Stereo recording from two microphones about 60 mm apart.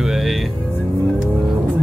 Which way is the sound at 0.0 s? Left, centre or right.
Centre.